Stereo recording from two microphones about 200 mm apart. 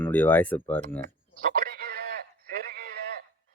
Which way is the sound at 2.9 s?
50° right (ahead or behind).